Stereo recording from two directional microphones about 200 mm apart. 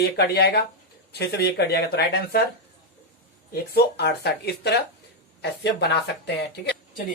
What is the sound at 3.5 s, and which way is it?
Speech, 55° left (ahead or behind).